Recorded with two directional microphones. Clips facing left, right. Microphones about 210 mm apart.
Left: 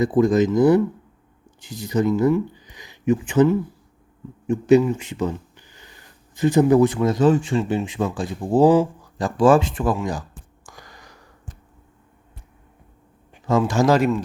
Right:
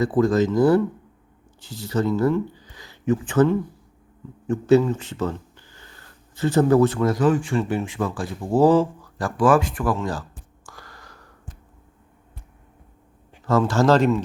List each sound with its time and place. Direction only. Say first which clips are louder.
0.0 s speech: left 2 dB; 15° left (ahead or behind)
10.7 s a sound: right 1 dB; 15° left (ahead or behind)
13.4 s speech: even; 15° left (ahead or behind)